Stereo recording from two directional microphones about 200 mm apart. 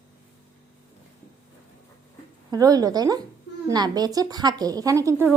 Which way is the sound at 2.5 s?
20° right (ahead or behind).